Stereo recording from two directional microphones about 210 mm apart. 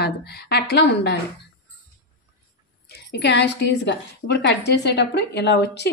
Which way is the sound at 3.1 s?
55° left (ahead or behind).